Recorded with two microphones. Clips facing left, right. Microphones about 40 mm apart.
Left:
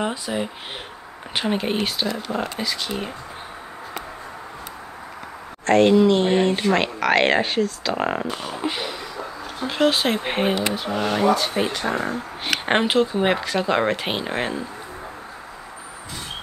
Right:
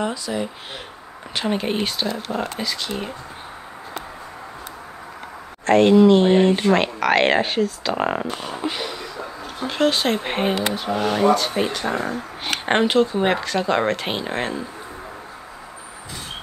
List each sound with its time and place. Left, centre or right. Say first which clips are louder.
0.0 s speech: even; centre
1.5 s speech: right 1 dB; centre
5.7 s speech: right 2 dB; centre